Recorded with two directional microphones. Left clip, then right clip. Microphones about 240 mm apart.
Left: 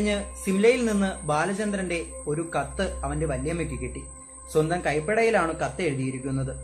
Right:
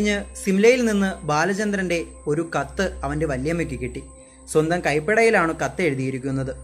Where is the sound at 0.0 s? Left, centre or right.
Centre.